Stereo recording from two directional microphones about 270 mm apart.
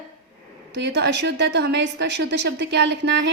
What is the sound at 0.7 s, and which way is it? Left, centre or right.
A woman's voice, right.